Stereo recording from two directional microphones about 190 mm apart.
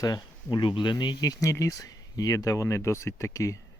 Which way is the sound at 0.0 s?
20° left (ahead or behind).